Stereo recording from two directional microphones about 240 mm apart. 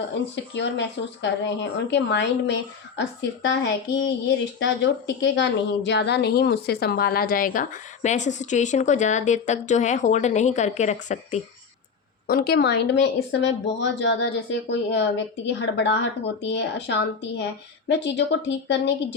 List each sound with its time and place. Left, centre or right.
0.5 s a woman's voice: left
12.3 s a woman's voice: left